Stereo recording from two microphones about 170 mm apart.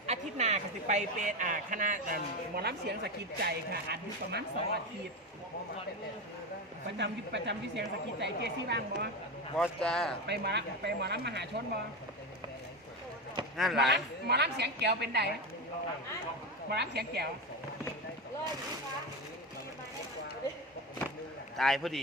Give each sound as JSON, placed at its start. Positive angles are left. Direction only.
{"t": 0.1, "sound": "speech", "side_deg": -40}
{"t": 2.6, "sound": "speech", "side_deg": -75}
{"t": 7.0, "sound": "a woman's voice", "side_deg": -90}
{"t": 9.6, "sound": "speech", "side_deg": 5}
{"t": 10.2, "sound": "a woman's voice", "side_deg": -80}
{"t": 13.6, "sound": "speech", "side_deg": 0}
{"t": 13.8, "sound": "a woman's voice", "side_deg": -85}
{"t": 16.6, "sound": "speech", "side_deg": -75}
{"t": 21.6, "sound": "speech", "side_deg": 0}